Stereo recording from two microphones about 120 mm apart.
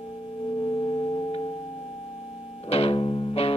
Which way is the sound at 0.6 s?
35° left (ahead or behind).